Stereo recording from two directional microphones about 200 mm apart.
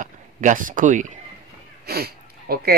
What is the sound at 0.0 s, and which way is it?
Speech, 40° right (ahead or behind).